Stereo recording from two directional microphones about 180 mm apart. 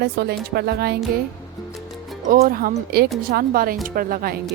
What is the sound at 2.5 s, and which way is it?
A woman's voice, 55° right (ahead or behind).